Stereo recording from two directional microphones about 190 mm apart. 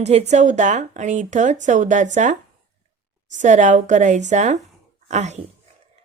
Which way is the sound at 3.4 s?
40° right (ahead or behind).